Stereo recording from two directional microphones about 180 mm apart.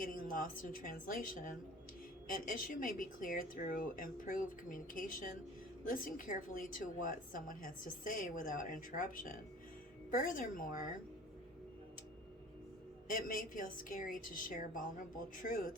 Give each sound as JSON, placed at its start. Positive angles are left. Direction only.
{"t": 0.0, "sound": "a woman's voice", "side_deg": 50}
{"t": 13.1, "sound": "a woman's voice", "side_deg": 50}